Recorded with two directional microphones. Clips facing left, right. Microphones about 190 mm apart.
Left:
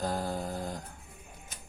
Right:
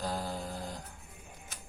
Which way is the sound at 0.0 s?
50° left (ahead or behind).